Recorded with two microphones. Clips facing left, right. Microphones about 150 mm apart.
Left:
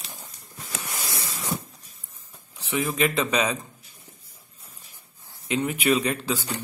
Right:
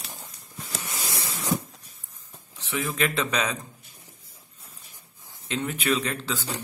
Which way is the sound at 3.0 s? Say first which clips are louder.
Left 2 dB; 5° left (ahead or behind).